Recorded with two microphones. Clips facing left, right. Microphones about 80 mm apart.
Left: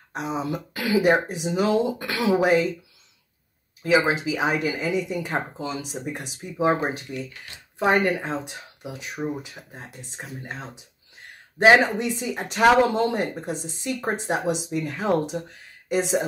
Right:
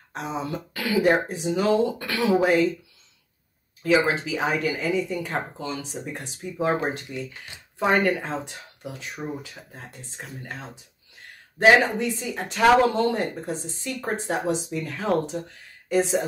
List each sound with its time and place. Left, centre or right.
0.1 s speech: centre
3.8 s speech: centre
7.1 s speech: right
7.8 s speech: centre